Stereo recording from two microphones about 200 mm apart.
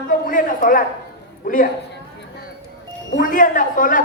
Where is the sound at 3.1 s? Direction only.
45° left (ahead or behind).